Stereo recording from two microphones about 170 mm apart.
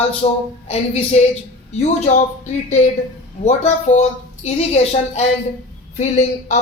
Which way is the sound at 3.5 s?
40° left (ahead or behind).